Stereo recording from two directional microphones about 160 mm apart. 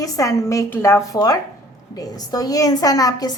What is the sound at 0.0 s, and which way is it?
A woman's voice, 20° left (ahead or behind).